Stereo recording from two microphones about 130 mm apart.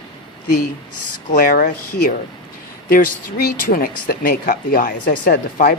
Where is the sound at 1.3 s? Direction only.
90° left.